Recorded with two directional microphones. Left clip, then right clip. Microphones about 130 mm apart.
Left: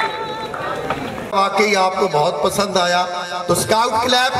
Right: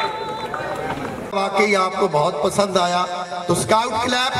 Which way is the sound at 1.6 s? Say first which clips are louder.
Right 1 dB; 25° right (ahead or behind).